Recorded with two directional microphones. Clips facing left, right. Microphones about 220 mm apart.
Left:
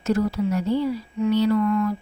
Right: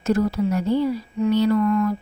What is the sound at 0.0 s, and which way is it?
Speech, 45° right (ahead or behind).